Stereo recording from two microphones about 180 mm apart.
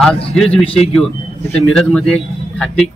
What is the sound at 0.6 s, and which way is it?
Speech, 30° left (ahead or behind).